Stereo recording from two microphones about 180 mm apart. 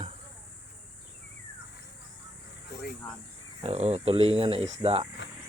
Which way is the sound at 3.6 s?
35° right (ahead or behind).